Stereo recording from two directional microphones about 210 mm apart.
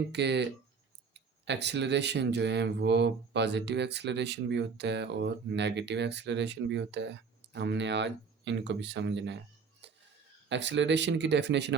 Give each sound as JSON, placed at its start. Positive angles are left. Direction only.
{"t": 0.1, "sound": "speech", "side_deg": -55}
{"t": 9.8, "sound": "music", "side_deg": -55}
{"t": 10.5, "sound": "speech", "side_deg": -60}